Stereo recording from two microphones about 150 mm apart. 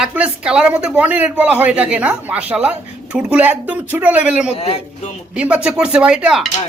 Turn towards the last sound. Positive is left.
turn(degrees=-5)  # may be behind; listen again after turning